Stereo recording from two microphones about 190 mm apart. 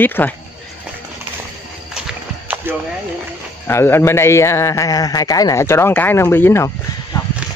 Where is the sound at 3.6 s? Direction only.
10° left (ahead or behind).